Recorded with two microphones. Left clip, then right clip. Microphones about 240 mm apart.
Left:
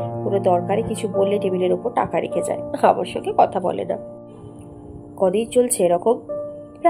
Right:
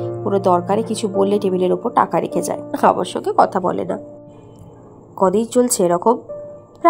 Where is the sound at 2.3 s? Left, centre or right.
Right.